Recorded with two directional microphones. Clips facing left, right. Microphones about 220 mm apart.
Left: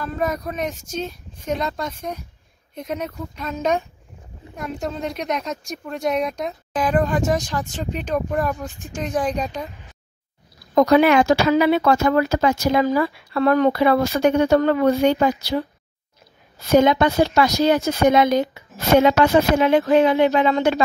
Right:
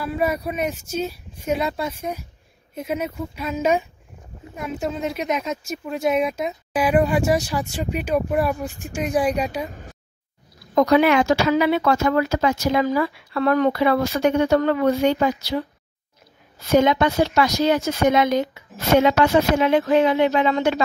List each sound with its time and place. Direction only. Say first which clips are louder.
0.0 s speech: right 1 dB; 10° right (ahead or behind)
9.7 s a sound: right 6 dB; 50° right (ahead or behind)
10.7 s speech: left 2 dB; 40° left (ahead or behind)
16.7 s speech: left 2 dB; 45° left (ahead or behind)
17.7 s speech: left 2 dB; 35° left (ahead or behind)